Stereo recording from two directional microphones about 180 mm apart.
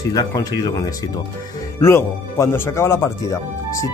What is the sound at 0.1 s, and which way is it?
Speech, 20° left (ahead or behind).